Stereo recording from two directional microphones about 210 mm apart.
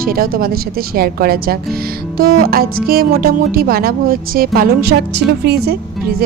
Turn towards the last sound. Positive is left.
turn(degrees=-50)  # may be behind; listen again after turning